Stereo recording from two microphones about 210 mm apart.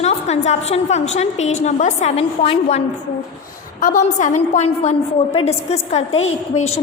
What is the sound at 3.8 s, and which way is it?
A woman's voice, 35° left (ahead or behind).